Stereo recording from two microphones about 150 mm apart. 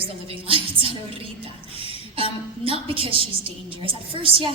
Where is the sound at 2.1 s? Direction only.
40° right (ahead or behind).